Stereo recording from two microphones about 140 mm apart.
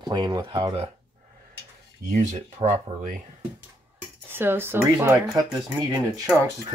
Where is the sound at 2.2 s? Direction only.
60° right (ahead or behind).